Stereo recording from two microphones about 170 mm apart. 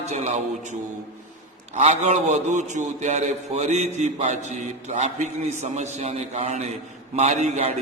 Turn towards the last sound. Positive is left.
turn(degrees=-40)  # may be behind; listen again after turning